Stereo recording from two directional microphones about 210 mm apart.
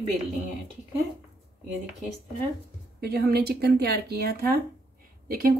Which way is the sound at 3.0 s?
45° right (ahead or behind).